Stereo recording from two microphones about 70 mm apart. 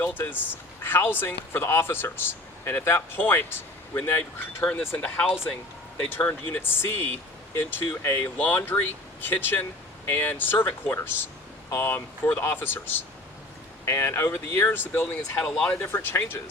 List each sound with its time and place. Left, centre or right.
0.0 s speech: left
15.4 s speech: centre
15.8 s speech: left